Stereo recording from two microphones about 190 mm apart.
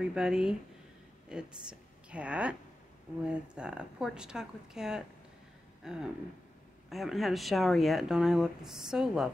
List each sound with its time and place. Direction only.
0.0 s a woman's voice: 5° right (ahead or behind)